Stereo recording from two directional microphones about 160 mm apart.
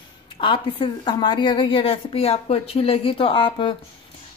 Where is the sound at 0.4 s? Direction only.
30° left (ahead or behind).